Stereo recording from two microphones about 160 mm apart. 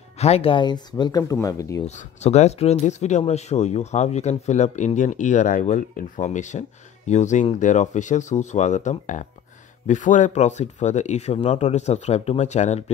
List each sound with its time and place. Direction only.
0.2 s speech: 40° left (ahead or behind); by 1.9 s 20° left (ahead or behind)
1.9 s speech: 45° left (ahead or behind)